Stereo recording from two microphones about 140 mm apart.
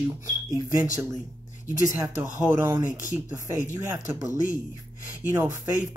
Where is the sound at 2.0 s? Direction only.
20° right (ahead or behind).